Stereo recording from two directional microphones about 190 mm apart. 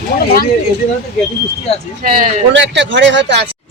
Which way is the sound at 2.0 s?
45° right (ahead or behind).